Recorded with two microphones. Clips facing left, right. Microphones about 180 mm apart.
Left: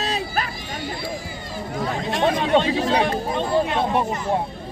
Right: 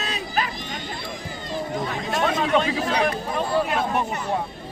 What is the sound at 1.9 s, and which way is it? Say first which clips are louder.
Chatter: left 5 dB; 35° left (ahead or behind).